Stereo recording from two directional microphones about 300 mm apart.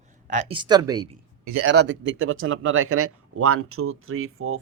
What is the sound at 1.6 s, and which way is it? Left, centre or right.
Speech, right.